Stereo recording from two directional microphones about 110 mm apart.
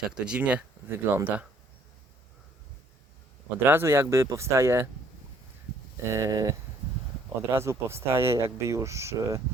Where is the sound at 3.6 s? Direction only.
20° right (ahead or behind).